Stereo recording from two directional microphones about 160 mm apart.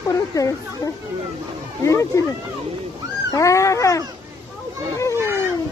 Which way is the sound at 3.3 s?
20° left (ahead or behind).